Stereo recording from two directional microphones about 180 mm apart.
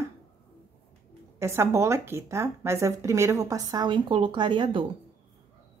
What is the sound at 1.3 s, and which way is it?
Speech, 15° right (ahead or behind).